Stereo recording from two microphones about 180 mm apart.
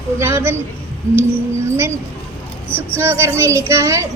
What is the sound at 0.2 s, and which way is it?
Speech, 15° right (ahead or behind).